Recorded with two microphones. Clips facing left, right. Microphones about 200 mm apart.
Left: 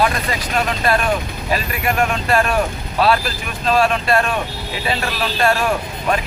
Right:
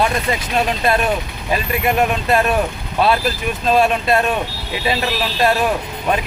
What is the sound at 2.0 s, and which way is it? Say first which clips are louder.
Speech: even; 20° right (ahead or behind).